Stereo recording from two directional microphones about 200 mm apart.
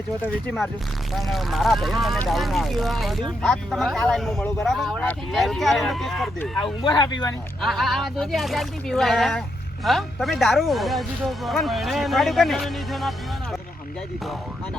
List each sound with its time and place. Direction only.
0.2 s speech: centre (ahead or behind)
6.8 s speech: 20° left (ahead or behind)
7.6 s speech: centre (ahead or behind)